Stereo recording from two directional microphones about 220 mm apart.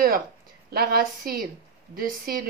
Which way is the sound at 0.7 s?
40° right (ahead or behind).